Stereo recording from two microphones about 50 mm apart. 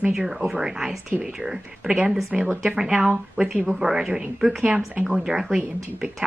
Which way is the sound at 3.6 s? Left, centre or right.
Centre.